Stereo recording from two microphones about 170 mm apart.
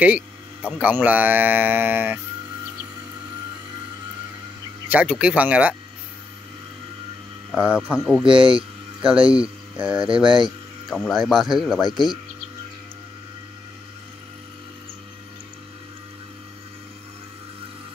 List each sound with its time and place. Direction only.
0.0 s a sound: 10° right (ahead or behind)
0.7 s speech: 10° right (ahead or behind)
4.8 s speech: 5° right (ahead or behind)
7.5 s speech: 10° right (ahead or behind)
8.3 s speech: 30° right (ahead or behind)
8.5 s music: 5° right (ahead or behind)
9.3 s speech: 5° right (ahead or behind)